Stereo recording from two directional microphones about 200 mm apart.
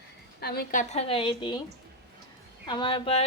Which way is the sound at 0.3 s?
50° left (ahead or behind).